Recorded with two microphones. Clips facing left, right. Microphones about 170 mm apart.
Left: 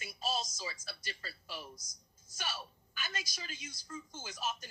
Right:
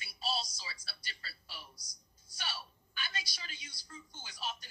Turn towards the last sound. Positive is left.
turn(degrees=45)  # may be behind; listen again after turning